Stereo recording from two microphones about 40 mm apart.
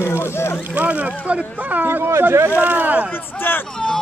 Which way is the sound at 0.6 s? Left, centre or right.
Right.